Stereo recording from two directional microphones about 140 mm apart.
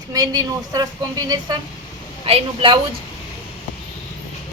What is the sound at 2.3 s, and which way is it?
Speech, 40° right (ahead or behind).